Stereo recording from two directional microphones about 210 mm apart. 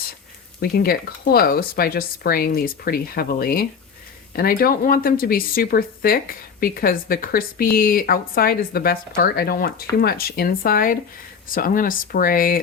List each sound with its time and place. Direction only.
0.6 s speech: 45° left (ahead or behind)